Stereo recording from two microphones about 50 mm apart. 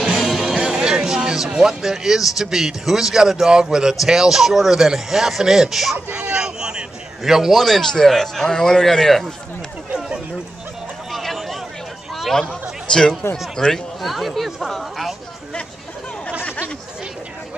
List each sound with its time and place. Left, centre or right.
0.0 s music: centre
1.5 s speech: centre
6.1 s a sound: centre
7.2 s speech: centre
7.5 s a man's voice: centre
9.9 s a sound: centre
11.1 s a sound: centre
13.2 s speech: left
14.0 s speech: centre
16.4 s chatter: left